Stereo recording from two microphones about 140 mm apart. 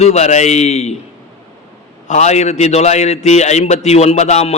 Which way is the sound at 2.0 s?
55° left (ahead or behind).